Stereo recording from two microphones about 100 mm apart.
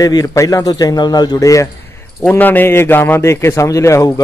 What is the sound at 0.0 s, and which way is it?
A man's voice, 35° left (ahead or behind).